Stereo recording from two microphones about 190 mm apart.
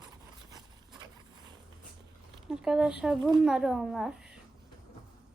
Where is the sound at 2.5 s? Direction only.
5° right (ahead or behind).